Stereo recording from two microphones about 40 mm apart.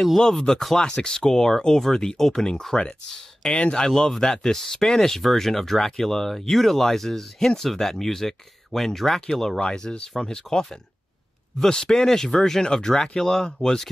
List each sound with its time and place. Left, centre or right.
0.2 s speech: centre
9.6 s speech: left